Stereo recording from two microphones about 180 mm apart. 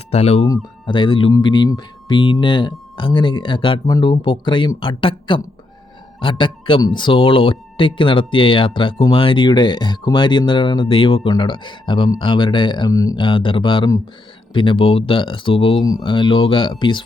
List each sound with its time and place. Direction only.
0.1 s speech: 35° left (ahead or behind)
0.4 s speech: 25° left (ahead or behind)
13.2 s speech: 30° left (ahead or behind)